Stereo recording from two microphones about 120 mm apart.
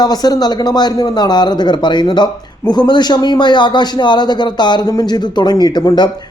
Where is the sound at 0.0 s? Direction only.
35° left (ahead or behind).